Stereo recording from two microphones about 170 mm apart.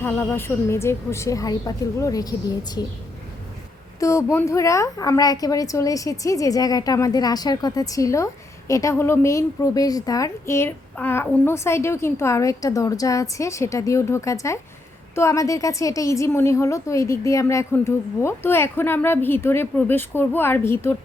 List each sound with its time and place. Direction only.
0.0 s a woman's voice: 15° left (ahead or behind)
4.0 s a woman's voice: 15° left (ahead or behind)